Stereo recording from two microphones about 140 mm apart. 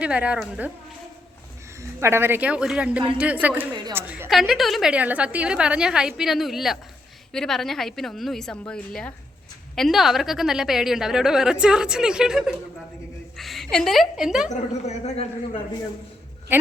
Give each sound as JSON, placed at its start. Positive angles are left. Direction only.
{"t": 0.0, "sound": "speech", "side_deg": -10}
{"t": 1.8, "sound": "speech", "side_deg": -20}
{"t": 3.9, "sound": "a sound", "side_deg": -15}
{"t": 4.3, "sound": "a woman's voice", "side_deg": 0}
{"t": 14.8, "sound": "a man's voice", "side_deg": 50}